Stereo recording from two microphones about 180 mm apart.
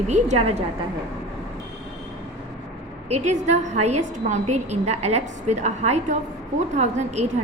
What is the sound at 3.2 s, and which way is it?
A woman's voice, 40° right (ahead or behind).